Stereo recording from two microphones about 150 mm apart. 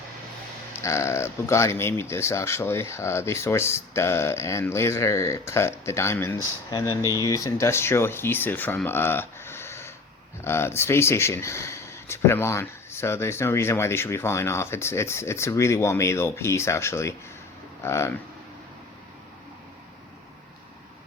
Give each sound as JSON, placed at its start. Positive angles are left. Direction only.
{"t": 0.8, "sound": "speech", "side_deg": 20}